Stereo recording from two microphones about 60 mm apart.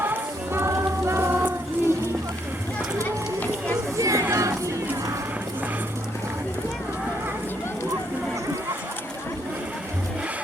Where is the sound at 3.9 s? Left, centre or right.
Right.